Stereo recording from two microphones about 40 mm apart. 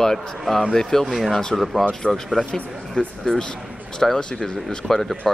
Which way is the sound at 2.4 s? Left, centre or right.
Left.